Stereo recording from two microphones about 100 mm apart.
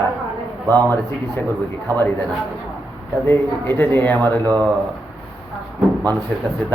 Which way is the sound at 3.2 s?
25° left (ahead or behind).